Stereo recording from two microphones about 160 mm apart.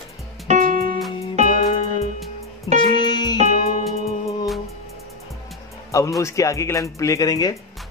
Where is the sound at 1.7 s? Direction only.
35° left (ahead or behind).